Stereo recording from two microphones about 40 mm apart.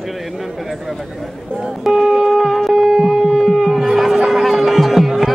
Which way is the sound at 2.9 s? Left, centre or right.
Centre.